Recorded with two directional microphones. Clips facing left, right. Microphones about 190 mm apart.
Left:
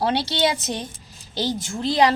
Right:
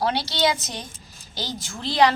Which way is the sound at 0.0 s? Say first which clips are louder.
Left 2 dB; 25° left (ahead or behind).